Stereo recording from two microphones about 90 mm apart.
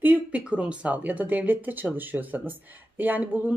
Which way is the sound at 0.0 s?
15° right (ahead or behind).